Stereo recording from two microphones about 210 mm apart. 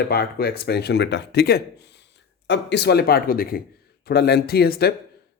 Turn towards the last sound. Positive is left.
turn(degrees=50)  # may be behind; listen again after turning